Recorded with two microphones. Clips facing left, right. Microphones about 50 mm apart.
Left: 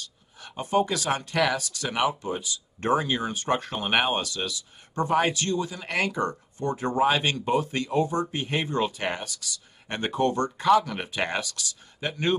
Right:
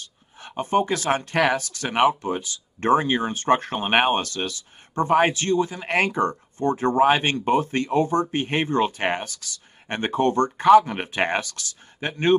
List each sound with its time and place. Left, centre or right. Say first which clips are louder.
0.0 s speech: right 2 dB; right